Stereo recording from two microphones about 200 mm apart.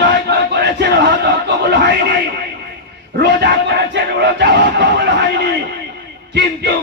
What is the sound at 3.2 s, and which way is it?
Speech, 55° right (ahead or behind).